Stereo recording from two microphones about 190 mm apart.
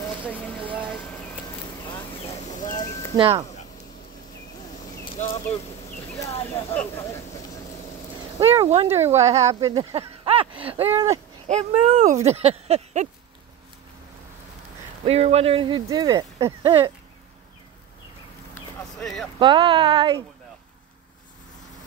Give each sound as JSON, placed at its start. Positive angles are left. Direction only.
{"t": 2.7, "sound": "a sound", "side_deg": 15}
{"t": 3.2, "sound": "speech", "side_deg": -25}
{"t": 6.5, "sound": "speech", "side_deg": 10}
{"t": 8.6, "sound": "speech", "side_deg": -35}
{"t": 9.0, "sound": "speech", "side_deg": -15}
{"t": 10.8, "sound": "speech", "side_deg": -15}
{"t": 11.4, "sound": "speech", "side_deg": -35}
{"t": 15.0, "sound": "speech", "side_deg": -35}
{"t": 18.5, "sound": "a sound", "side_deg": 5}
{"t": 19.4, "sound": "speech", "side_deg": -25}